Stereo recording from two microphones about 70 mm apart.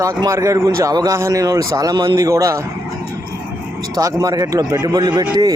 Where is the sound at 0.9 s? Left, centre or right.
Right.